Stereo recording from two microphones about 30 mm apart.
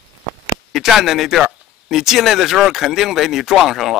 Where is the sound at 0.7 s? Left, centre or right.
Centre.